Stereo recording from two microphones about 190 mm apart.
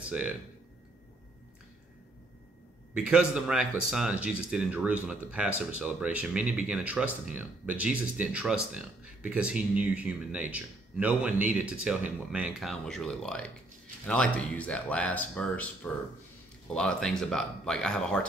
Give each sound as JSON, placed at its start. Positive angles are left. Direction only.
{"t": 2.9, "sound": "speech", "side_deg": -5}